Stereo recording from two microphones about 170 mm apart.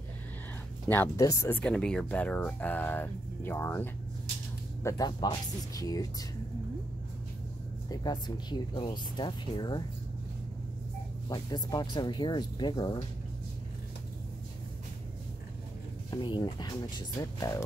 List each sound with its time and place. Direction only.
0.8 s speech: 10° left (ahead or behind)
7.9 s speech: 25° left (ahead or behind)
11.2 s speech: 25° left (ahead or behind)
16.1 s speech: 25° left (ahead or behind)